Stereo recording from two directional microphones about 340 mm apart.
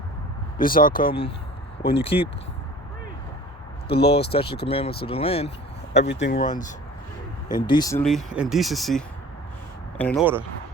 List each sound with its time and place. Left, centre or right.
0.6 s speech: left
3.9 s speech: centre
6.0 s speech: left
7.4 s speech: centre